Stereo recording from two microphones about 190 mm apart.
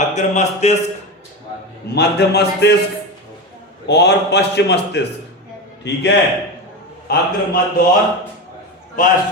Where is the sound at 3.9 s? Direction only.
60° left (ahead or behind).